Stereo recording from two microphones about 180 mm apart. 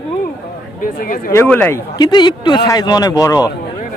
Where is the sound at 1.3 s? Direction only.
10° left (ahead or behind).